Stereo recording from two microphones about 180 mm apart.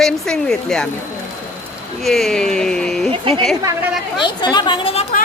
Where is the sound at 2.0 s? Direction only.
Centre (ahead or behind).